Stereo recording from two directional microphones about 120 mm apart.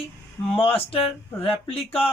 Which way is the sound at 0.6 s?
50° left (ahead or behind).